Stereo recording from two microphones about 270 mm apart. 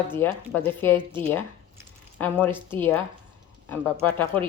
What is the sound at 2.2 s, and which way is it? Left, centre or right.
Speech, centre.